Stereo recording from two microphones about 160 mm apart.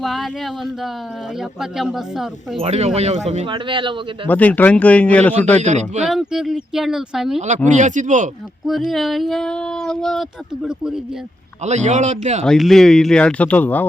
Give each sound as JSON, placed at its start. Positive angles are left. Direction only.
{"t": 0.0, "sound": "speech", "side_deg": 0}
{"t": 2.6, "sound": "speech", "side_deg": -40}
{"t": 3.4, "sound": "speech", "side_deg": -30}
{"t": 4.3, "sound": "speech", "side_deg": 10}
{"t": 5.6, "sound": "speech", "side_deg": -45}
{"t": 6.1, "sound": "speech", "side_deg": 0}
{"t": 7.3, "sound": "speech", "side_deg": -50}
{"t": 8.6, "sound": "speech", "side_deg": 0}
{"t": 11.6, "sound": "speech", "side_deg": -45}
{"t": 12.5, "sound": "speech", "side_deg": 0}